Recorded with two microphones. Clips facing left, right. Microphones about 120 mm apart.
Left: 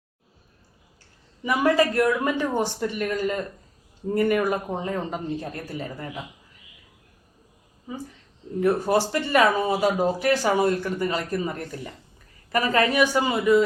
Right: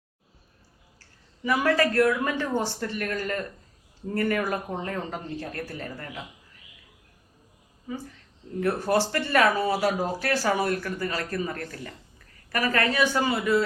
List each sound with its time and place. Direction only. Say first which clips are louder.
1.5 s speech: left 2 dB; 15° left (ahead or behind)
8.6 s speech: left 3 dB; 15° left (ahead or behind)